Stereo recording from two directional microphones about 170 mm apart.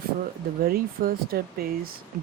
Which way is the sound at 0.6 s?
60° right (ahead or behind).